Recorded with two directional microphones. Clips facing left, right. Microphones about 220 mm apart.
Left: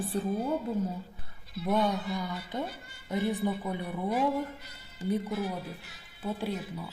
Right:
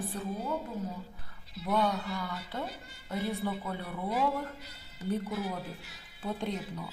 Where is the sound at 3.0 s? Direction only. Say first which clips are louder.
Left 4 dB; 15° left (ahead or behind).